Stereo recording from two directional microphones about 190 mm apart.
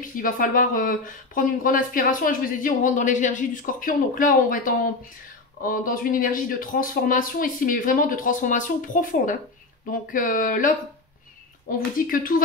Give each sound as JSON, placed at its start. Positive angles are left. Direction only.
{"t": 0.0, "sound": "speech", "side_deg": 45}
{"t": 12.1, "sound": "speech", "side_deg": 45}